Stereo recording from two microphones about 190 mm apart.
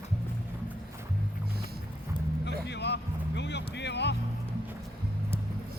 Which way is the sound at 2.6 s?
65° left (ahead or behind).